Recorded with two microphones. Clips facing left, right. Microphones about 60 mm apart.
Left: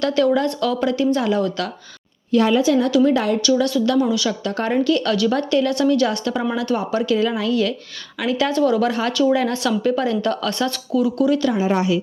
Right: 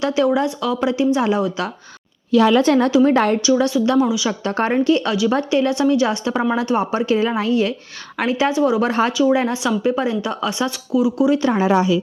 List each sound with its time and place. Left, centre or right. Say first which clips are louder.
0.0 s a woman's voice: even; centre
0.8 s a woman's voice: right 4 dB; centre
2.3 s a woman's voice: right 3 dB; right
2.6 s a woman's voice: right 2 dB; right
3.5 s a woman's voice: even; right
4.0 s a woman's voice: right 1 dB; centre
4.3 s a woman's voice: right 2 dB; right; by 8.8 s centre
8.8 s a woman's voice: right 2 dB; right
9.5 s a woman's voice: even; centre
11.5 s a woman's voice: right 2 dB; right